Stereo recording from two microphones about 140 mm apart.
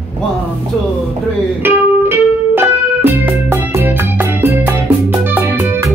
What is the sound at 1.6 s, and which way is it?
Music, 15° right (ahead or behind).